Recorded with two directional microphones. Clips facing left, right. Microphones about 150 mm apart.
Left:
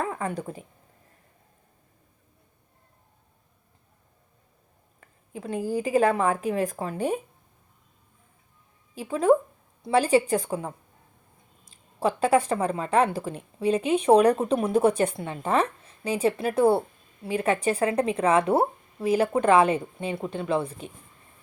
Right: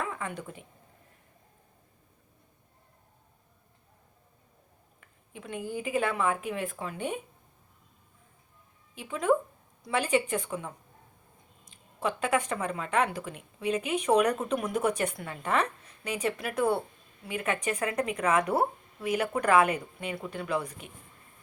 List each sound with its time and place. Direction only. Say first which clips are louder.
0.0 s a sound: left 6 dB; 35° left (ahead or behind)
4.9 s speech: left 8 dB; 35° left (ahead or behind)
9.0 s speech: left 6 dB; 35° left (ahead or behind)